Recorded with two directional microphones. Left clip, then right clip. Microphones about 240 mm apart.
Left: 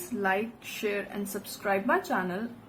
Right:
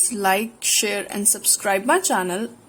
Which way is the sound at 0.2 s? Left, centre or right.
Right.